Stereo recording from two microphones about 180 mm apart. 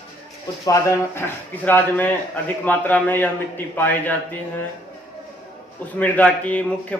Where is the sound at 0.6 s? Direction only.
20° left (ahead or behind).